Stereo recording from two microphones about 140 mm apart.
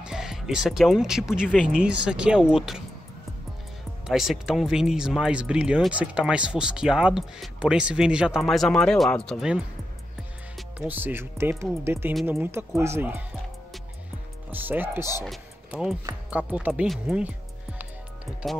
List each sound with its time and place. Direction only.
0.0 s speech: 5° right (ahead or behind)
4.1 s speech: centre (ahead or behind)
10.9 s speech: 15° right (ahead or behind)
14.5 s speech: 15° right (ahead or behind)
15.2 s speech: 5° right (ahead or behind)
18.4 s speech: centre (ahead or behind)